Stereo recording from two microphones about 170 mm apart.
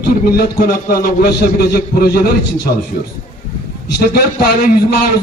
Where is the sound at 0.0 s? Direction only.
65° left (ahead or behind).